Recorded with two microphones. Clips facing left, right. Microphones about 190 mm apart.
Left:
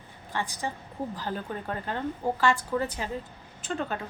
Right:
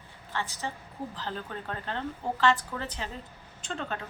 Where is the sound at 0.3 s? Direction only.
15° left (ahead or behind).